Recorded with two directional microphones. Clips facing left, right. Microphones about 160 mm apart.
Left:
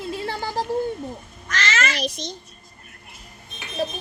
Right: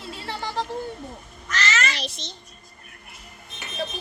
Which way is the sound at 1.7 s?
45° left (ahead or behind).